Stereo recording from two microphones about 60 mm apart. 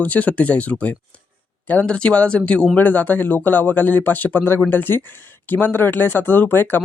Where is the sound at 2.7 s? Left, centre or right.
Left.